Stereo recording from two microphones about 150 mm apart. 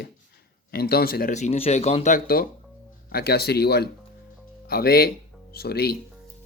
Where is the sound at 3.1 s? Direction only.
90° left.